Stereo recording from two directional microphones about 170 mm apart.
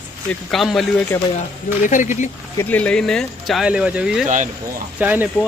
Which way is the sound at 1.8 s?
50° left (ahead or behind).